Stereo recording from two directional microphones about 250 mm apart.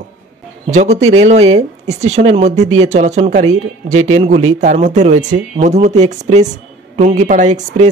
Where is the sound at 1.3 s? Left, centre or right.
Right.